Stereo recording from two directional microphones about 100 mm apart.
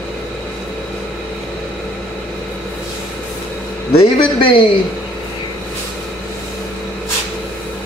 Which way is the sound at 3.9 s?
65° left (ahead or behind).